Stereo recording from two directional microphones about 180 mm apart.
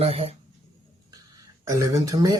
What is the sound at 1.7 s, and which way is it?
Speech, 20° right (ahead or behind).